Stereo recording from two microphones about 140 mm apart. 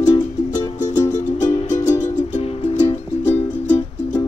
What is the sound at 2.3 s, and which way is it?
Music, 45° left (ahead or behind).